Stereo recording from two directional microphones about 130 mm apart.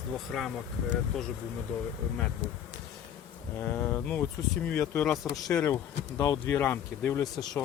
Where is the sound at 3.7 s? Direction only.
15° left (ahead or behind).